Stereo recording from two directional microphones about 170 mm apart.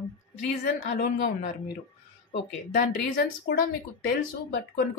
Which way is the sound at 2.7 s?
65° left (ahead or behind).